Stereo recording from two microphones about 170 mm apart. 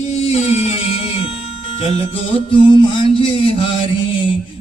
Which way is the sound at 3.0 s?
35° left (ahead or behind).